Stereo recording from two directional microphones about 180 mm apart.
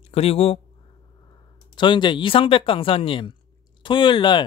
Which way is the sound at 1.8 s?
25° left (ahead or behind).